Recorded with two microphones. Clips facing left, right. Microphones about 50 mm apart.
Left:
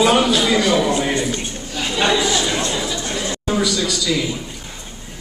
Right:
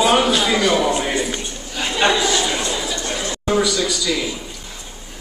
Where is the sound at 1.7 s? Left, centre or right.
Centre.